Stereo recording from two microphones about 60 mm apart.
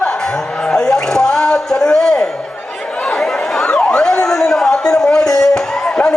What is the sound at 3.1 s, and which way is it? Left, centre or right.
Chatter, centre.